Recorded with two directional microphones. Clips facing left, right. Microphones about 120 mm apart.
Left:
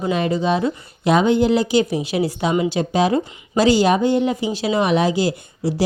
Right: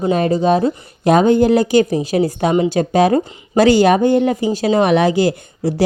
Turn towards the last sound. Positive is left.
turn(degrees=-55)  # may be behind; listen again after turning